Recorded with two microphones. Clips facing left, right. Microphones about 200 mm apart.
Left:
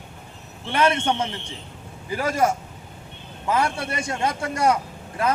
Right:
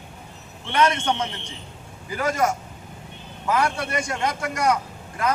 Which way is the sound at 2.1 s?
30° left (ahead or behind).